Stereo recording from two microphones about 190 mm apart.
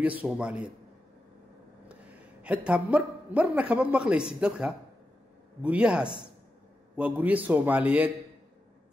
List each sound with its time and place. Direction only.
0.0 s a man's voice: 5° right (ahead or behind)
1.9 s a man's voice: 5° right (ahead or behind)